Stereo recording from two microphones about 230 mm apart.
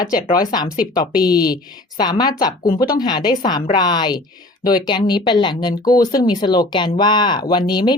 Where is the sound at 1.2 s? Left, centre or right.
Centre.